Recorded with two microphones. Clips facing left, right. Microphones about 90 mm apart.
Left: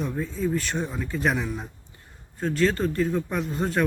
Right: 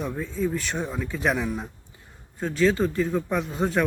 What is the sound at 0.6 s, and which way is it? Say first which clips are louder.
Speech: even; 15° right (ahead or behind).